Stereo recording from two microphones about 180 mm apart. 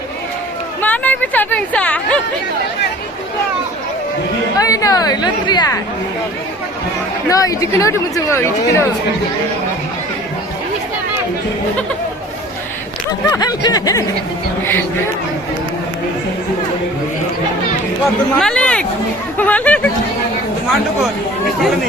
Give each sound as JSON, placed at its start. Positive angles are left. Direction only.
{"t": 0.8, "sound": "chatter", "side_deg": 10}
{"t": 4.5, "sound": "speech", "side_deg": 20}
{"t": 7.3, "sound": "speech", "side_deg": 20}
{"t": 13.3, "sound": "snicker", "side_deg": 20}
{"t": 18.3, "sound": "speech", "side_deg": 5}